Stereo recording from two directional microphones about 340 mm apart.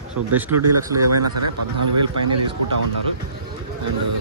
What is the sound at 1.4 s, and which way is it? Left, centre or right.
Speech, right.